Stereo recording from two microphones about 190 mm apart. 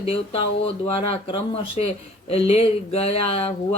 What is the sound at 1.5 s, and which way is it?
Speech, 35° left (ahead or behind).